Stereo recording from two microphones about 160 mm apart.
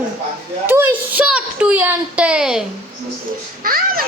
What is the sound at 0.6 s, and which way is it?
A child's voice, 10° right (ahead or behind).